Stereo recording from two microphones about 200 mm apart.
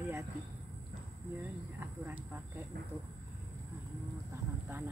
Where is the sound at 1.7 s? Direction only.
10° right (ahead or behind).